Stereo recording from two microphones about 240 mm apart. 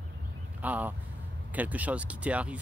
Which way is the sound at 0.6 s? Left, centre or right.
Centre.